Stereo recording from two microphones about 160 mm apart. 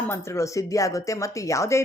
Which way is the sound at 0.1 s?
15° left (ahead or behind).